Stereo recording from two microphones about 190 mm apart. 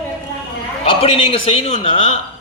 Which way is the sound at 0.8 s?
30° left (ahead or behind).